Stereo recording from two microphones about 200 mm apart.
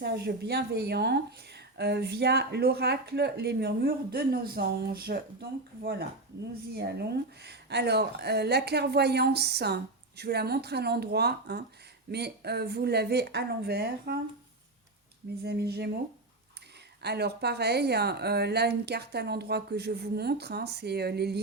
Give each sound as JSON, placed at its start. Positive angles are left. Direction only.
{"t": 0.0, "sound": "a woman's voice", "side_deg": -55}
{"t": 6.7, "sound": "a woman's voice", "side_deg": -55}
{"t": 15.4, "sound": "a woman's voice", "side_deg": -55}
{"t": 17.0, "sound": "a woman's voice", "side_deg": -55}